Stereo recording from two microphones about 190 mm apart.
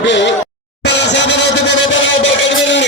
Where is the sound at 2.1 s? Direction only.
75° left (ahead or behind).